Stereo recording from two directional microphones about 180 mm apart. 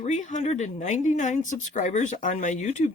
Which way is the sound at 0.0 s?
45° left (ahead or behind).